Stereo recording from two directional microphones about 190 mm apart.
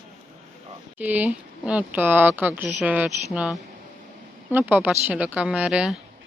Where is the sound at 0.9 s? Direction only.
10° right (ahead or behind).